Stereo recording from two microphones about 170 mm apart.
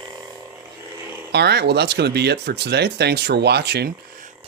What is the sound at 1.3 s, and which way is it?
Speech, 75° right (ahead or behind).